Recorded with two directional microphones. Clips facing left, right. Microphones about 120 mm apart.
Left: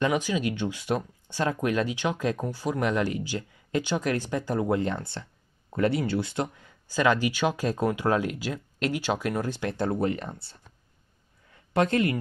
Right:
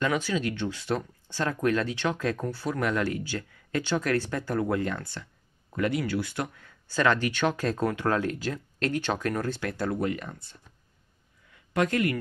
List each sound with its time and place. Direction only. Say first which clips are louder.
0.0 s speech: left 2 dB; 15° left (ahead or behind)
6.9 s speech: left 1 dB; 15° left (ahead or behind)